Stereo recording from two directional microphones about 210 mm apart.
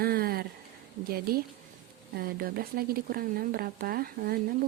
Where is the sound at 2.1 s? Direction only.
45° right (ahead or behind).